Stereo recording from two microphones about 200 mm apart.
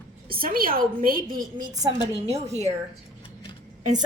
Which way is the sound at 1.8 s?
20° right (ahead or behind).